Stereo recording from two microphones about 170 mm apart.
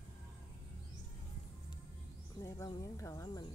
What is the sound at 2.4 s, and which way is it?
Speech, 15° left (ahead or behind).